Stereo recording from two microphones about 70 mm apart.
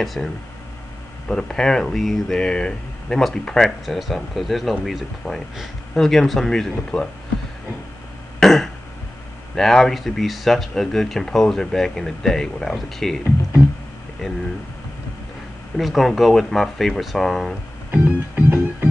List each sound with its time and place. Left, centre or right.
0.0 s speech: centre
1.3 s speech: centre
8.4 s throat clearing: centre
9.6 s speech: centre
15.8 s speech: centre
17.9 s music: right